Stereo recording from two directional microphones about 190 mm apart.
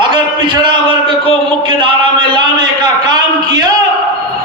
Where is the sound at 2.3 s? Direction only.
25° right (ahead or behind).